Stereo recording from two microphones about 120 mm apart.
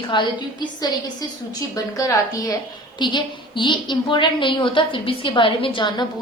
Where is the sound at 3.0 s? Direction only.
40° left (ahead or behind).